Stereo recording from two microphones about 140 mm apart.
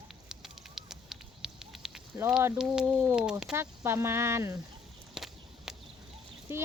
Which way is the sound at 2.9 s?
20° right (ahead or behind).